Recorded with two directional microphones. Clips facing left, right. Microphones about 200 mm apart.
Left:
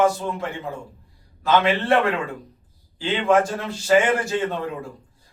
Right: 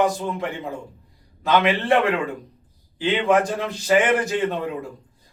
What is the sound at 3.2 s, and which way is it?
A man's voice, 20° right (ahead or behind).